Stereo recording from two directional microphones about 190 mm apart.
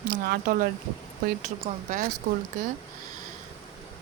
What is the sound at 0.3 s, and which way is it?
Speech, 55° right (ahead or behind).